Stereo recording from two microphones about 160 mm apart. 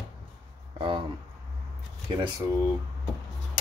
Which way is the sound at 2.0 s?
30° right (ahead or behind).